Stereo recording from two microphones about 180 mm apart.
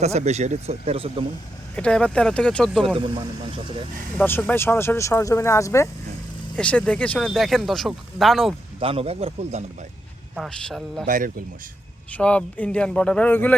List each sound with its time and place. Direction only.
0.0 s speech: 40° right (ahead or behind)
1.7 s speech: 5° left (ahead or behind)
4.2 s speech: 10° left (ahead or behind)
8.8 s speech: 30° right (ahead or behind)
10.3 s speech: centre (ahead or behind)
11.0 s speech: 50° right (ahead or behind)
12.1 s speech: 5° left (ahead or behind)